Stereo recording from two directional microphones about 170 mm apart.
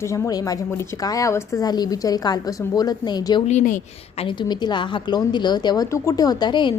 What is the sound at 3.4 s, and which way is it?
Speech, 45° left (ahead or behind).